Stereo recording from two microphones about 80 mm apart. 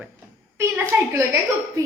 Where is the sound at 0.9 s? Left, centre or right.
Right.